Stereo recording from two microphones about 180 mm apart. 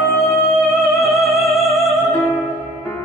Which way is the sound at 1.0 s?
Centre (ahead or behind).